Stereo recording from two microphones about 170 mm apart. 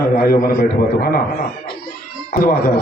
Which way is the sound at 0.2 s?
60° left (ahead or behind).